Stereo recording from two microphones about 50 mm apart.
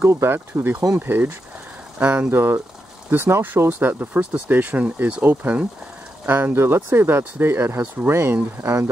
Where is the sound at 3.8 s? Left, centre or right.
Right.